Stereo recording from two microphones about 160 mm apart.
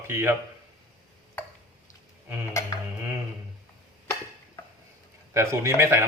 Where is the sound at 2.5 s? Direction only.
20° left (ahead or behind).